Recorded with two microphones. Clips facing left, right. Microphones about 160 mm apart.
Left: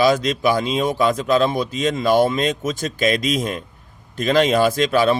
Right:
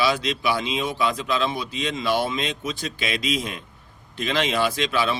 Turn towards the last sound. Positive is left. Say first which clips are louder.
# left 7 dB
turn(degrees=45)  # may be behind; listen again after turning